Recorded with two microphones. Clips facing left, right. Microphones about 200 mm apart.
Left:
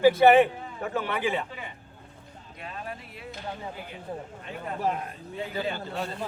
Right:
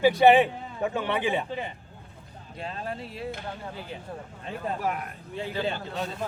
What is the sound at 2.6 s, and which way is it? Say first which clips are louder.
Speech: right 4 dB; 30° right (ahead or behind).